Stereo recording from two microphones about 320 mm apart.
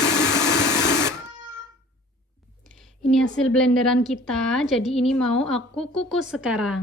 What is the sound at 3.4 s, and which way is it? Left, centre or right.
A woman's voice, centre.